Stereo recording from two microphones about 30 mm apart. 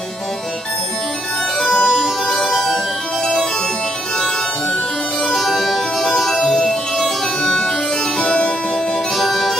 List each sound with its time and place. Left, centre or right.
1.6 s music: centre
5.2 s music: centre
7.4 s harpsichord: left
9.1 s music: centre